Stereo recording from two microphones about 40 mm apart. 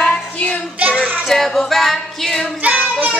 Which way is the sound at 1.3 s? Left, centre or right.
Centre.